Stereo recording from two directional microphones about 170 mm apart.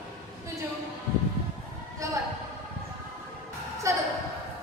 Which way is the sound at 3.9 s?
15° right (ahead or behind).